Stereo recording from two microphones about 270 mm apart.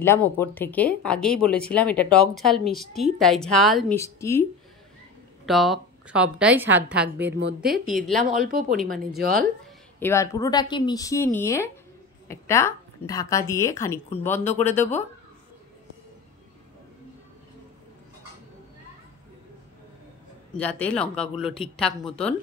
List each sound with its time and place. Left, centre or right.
0.0 s a woman's voice: centre
5.4 s speech: centre
7.2 s speech: right
8.2 s speech: right
9.9 s a woman's voice: centre
20.5 s speech: centre